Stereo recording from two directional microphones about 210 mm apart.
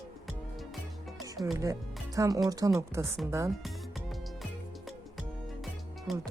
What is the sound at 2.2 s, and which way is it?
Speech, 15° right (ahead or behind).